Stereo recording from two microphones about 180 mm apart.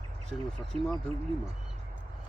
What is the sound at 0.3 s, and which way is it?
Speech, 5° left (ahead or behind).